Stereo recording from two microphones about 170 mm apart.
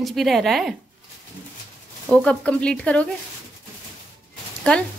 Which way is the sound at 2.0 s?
5° left (ahead or behind).